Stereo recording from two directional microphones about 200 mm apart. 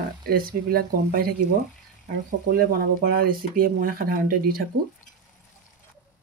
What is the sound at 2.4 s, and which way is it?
Speech, 45° right (ahead or behind).